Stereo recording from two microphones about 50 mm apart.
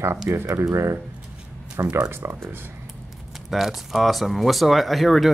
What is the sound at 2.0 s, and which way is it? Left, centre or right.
Speech, right.